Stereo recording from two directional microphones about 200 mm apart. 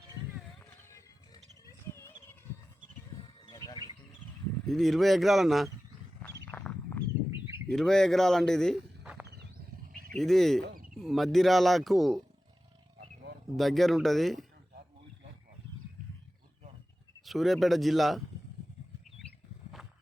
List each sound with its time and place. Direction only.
0.9 s wild animals: 15° left (ahead or behind)
3.4 s bird: 20° left (ahead or behind)
4.6 s speech: centre (ahead or behind)
6.2 s a sound: 10° left (ahead or behind)
7.7 s speech: centre (ahead or behind)
13.6 s speech: centre (ahead or behind)
17.2 s speech: centre (ahead or behind)
19.8 s walk: centre (ahead or behind)